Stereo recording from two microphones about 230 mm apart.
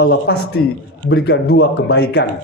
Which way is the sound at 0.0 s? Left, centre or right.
Left.